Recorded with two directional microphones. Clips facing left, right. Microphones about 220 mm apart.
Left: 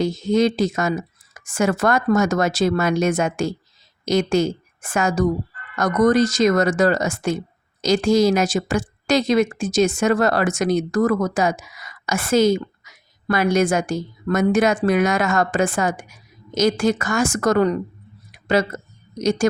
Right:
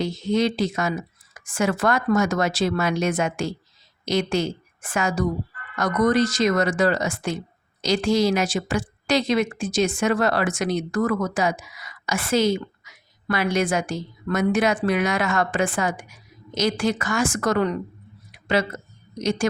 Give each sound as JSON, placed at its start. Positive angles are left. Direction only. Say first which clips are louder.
{"t": 0.0, "sound": "a woman's voice", "louder": "left 4 dB", "side_deg": 45}
{"t": 18.3, "sound": "a sound", "louder": "left 3 dB", "side_deg": 45}
{"t": 19.2, "sound": "speech", "louder": "left 4 dB", "side_deg": 45}